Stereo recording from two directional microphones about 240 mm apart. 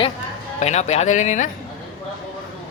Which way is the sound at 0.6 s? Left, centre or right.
Left.